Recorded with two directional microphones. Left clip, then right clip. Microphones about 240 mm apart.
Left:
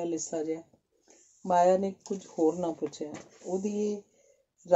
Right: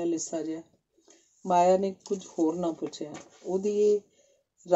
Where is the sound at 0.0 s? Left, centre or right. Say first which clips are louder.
Right 2 dB; left.